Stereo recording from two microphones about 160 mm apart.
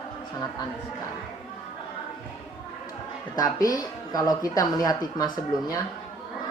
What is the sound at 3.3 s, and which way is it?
Speech, 25° left (ahead or behind).